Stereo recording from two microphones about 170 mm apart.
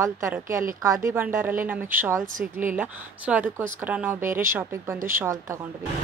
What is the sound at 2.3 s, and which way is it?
Speech, 50° right (ahead or behind).